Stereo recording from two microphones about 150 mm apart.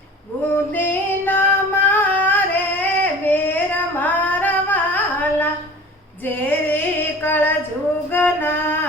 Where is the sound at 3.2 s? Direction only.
10° left (ahead or behind).